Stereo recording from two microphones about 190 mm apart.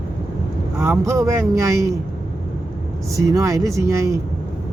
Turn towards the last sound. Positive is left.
turn(degrees=-15)  # may be behind; listen again after turning